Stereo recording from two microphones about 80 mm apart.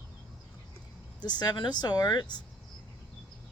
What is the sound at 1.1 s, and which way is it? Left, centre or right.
Speech, left.